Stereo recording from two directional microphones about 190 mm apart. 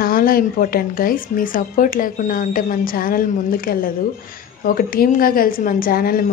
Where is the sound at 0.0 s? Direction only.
50° left (ahead or behind).